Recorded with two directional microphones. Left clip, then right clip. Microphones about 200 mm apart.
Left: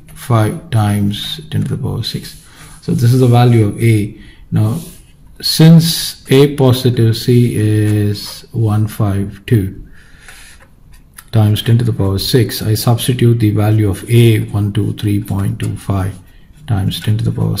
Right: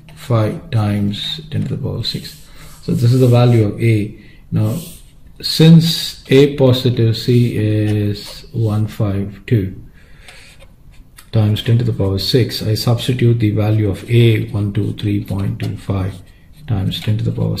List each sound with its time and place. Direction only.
0.3 s speech: 45° left (ahead or behind)
2.8 s speech: 50° left (ahead or behind)
5.4 s speech: 45° left (ahead or behind)
11.2 s speech: 40° left (ahead or behind)